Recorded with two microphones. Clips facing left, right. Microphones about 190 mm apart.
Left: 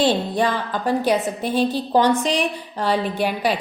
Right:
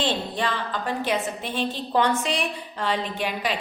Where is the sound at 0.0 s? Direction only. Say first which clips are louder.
Left 7 dB; 40° left (ahead or behind).